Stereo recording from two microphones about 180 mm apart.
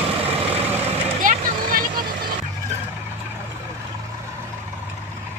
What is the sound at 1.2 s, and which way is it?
Vehicle, 50° right (ahead or behind).